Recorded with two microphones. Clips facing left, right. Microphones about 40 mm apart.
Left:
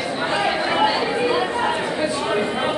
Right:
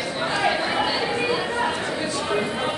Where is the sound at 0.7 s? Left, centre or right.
Centre.